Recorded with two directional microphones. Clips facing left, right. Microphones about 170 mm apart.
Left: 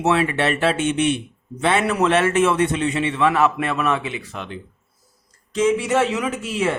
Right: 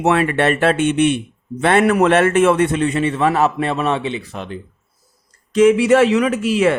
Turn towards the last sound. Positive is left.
turn(degrees=-80)